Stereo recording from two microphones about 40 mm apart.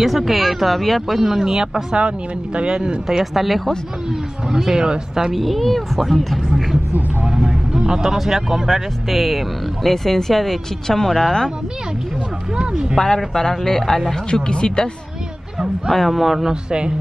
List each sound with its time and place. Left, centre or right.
0.0 s speech: centre
3.1 s speech: centre
4.5 s speech: centre
5.3 s speech: centre
7.2 s vehicle: centre
8.2 s speech: centre
9.8 s speech: centre
12.9 s speech: centre
14.3 s speech: left
15.9 s speech: centre
16.4 s speech: right